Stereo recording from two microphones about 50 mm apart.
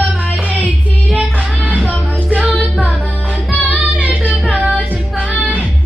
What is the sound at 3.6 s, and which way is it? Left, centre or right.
Child singing, right.